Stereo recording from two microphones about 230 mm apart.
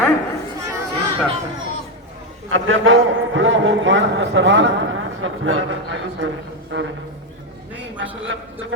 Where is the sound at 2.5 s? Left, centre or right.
Right.